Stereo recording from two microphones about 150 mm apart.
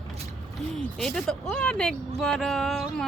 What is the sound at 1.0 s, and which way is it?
Speech, 5° left (ahead or behind).